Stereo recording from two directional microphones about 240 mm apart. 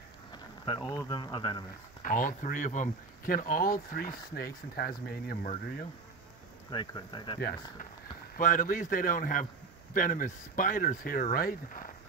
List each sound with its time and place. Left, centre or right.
0.3 s speech: centre
2.0 s speech: left
6.7 s speech: centre
8.4 s speech: left